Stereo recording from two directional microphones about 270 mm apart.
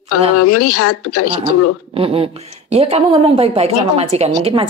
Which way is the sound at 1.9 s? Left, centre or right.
Right.